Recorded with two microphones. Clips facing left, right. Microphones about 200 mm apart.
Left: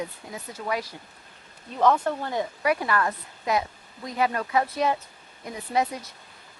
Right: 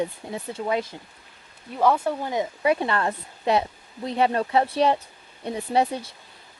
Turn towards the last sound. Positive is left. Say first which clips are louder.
# right 3 dB
turn(degrees=-30)  # may be behind; listen again after turning